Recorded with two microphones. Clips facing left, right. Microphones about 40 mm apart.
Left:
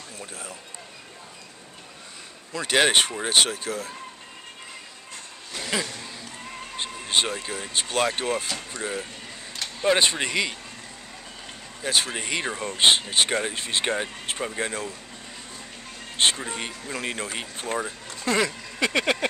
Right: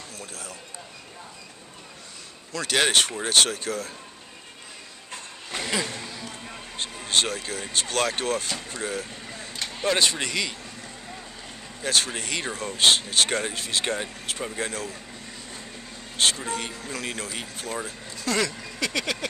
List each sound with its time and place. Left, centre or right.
0.2 s speech: left
2.5 s speech: centre
5.5 s a sound: right
6.8 s speech: centre
11.8 s speech: centre
13.6 s speech: left
16.2 s speech: left
18.2 s a sound: left